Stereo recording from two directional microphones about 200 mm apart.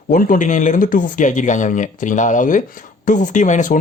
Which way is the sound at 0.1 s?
40° left (ahead or behind).